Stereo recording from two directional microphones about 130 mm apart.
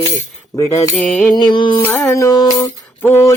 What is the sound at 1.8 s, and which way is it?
Music, 15° left (ahead or behind).